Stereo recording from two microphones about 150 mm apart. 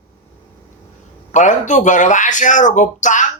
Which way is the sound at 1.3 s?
55° left (ahead or behind).